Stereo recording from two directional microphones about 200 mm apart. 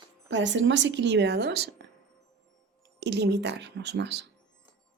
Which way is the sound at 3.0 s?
55° right (ahead or behind).